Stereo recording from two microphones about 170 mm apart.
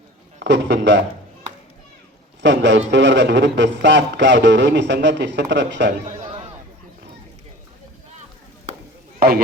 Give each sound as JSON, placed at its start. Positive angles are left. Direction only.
{"t": 0.4, "sound": "a man's voice", "side_deg": -90}
{"t": 2.4, "sound": "a man's voice", "side_deg": -90}
{"t": 6.1, "sound": "a sound", "side_deg": -20}